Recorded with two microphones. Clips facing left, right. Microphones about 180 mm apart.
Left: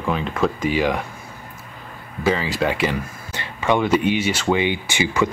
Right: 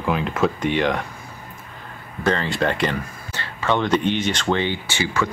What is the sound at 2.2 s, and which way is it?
Speech, 5° left (ahead or behind).